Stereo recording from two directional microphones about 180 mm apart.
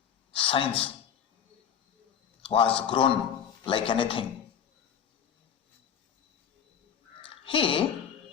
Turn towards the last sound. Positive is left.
turn(degrees=30)  # may be behind; listen again after turning